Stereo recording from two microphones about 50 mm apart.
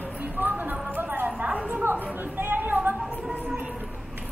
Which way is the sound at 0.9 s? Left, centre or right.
Right.